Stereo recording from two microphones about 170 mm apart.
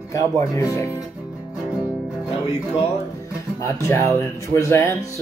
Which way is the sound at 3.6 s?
15° left (ahead or behind).